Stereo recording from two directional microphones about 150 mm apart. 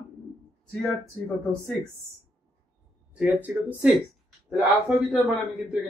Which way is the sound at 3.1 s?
10° right (ahead or behind).